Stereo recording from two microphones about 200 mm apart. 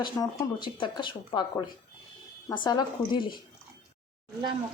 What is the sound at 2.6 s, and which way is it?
Speech, 20° left (ahead or behind).